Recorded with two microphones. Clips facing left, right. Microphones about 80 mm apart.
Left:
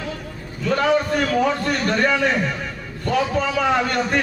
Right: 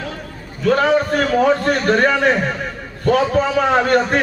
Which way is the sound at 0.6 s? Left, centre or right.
Right.